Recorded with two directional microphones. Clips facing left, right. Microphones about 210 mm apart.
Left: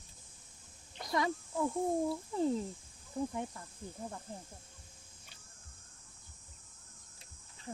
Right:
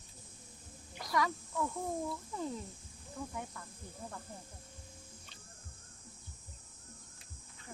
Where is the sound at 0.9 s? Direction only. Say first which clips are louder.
Left 1 dB; 25° left (ahead or behind).